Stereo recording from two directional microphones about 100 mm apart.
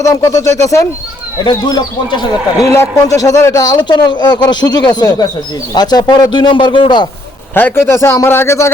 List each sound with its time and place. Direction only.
0.0 s speech: 35° left (ahead or behind)
1.5 s speech: 45° left (ahead or behind)
2.6 s a man's voice: 30° left (ahead or behind); by 7.1 s 50° left (ahead or behind)
7.5 s a man's voice: 25° left (ahead or behind)